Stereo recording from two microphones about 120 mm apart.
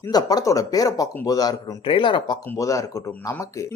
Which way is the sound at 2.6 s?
25° left (ahead or behind).